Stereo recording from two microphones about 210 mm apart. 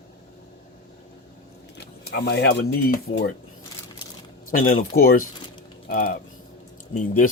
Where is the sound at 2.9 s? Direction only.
45° left (ahead or behind).